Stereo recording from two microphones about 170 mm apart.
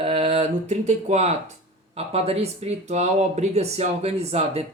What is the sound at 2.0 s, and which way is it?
Speech, 35° right (ahead or behind).